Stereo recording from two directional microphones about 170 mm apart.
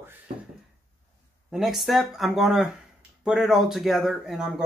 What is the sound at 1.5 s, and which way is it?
Speech, centre (ahead or behind).